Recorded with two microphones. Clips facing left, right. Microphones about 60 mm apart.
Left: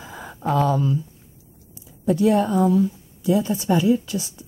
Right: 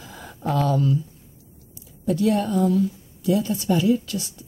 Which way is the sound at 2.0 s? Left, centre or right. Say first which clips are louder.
Left 3 dB; left.